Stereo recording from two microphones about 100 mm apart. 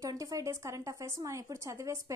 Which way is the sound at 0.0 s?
35° right (ahead or behind).